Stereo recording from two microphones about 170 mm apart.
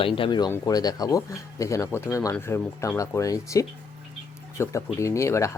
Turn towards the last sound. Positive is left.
turn(degrees=15)  # may be behind; listen again after turning